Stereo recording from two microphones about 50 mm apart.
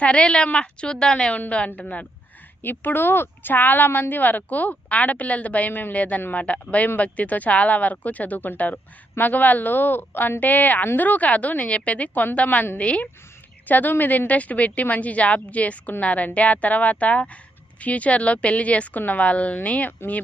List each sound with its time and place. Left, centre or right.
0.0 s a woman's voice: left
2.6 s a woman's voice: left